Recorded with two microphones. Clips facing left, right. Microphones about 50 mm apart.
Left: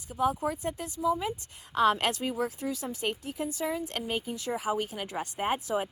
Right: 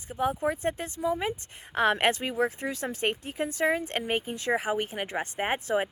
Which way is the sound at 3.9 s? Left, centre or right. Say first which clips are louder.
Right 3 dB; right.